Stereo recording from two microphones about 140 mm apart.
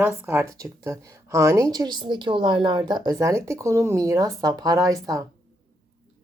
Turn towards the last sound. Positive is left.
turn(degrees=-25)  # may be behind; listen again after turning